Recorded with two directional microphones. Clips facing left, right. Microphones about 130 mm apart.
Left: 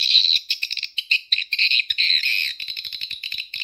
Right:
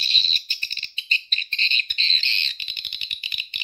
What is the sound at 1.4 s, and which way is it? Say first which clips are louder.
Squawk: left 1 dB; 30° right (ahead or behind).